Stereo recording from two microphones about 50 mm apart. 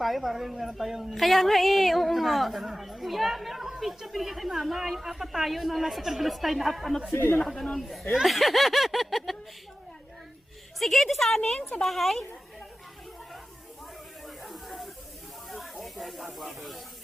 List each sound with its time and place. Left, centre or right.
0.0 s a woman's voice: centre
10.8 s a woman's voice: centre
14.4 s snake: centre